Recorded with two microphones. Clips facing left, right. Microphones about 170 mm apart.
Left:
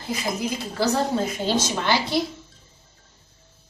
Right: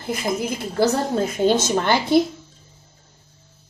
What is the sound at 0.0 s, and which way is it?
A woman's voice, 55° right (ahead or behind).